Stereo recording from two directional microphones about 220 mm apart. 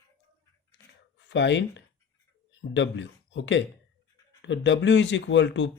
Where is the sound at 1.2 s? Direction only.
55° left (ahead or behind).